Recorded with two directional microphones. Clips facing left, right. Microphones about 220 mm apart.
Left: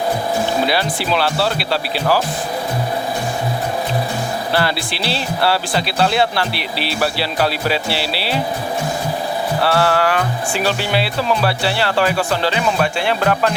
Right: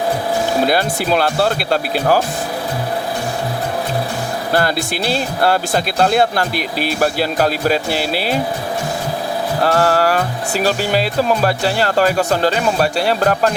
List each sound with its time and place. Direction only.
0.6 s speech: 45° right (ahead or behind)
4.5 s speech: 45° right (ahead or behind)
9.6 s speech: 40° right (ahead or behind)